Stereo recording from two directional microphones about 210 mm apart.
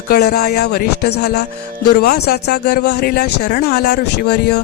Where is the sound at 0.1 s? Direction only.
50° left (ahead or behind).